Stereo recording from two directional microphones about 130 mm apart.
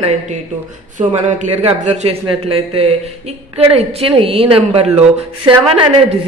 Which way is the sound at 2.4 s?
50° right (ahead or behind).